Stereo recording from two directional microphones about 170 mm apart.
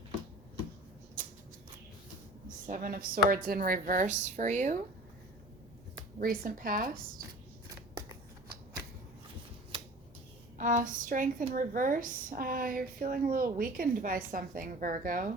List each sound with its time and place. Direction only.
1.2 s a sound: 50° right (ahead or behind)
2.6 s a woman's voice: 55° right (ahead or behind)
6.1 s a woman's voice: 55° right (ahead or behind)
10.6 s a woman's voice: 50° right (ahead or behind)